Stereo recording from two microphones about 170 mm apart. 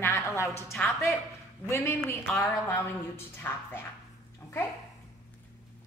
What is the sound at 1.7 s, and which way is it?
Speech, 15° left (ahead or behind).